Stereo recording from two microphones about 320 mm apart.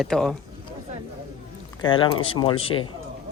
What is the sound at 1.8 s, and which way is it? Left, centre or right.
Speech, centre.